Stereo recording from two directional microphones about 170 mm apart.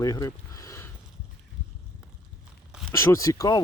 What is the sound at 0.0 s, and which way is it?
Speech, 20° left (ahead or behind).